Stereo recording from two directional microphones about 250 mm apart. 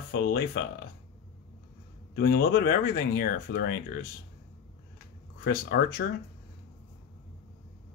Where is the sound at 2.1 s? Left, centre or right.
Left.